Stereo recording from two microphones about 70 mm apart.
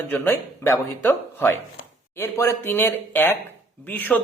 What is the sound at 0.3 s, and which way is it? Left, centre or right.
Speech, left.